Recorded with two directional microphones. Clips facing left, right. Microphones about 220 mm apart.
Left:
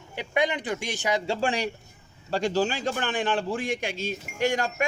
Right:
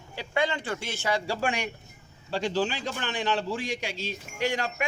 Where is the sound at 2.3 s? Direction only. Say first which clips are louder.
Left 3 dB; 45° left (ahead or behind).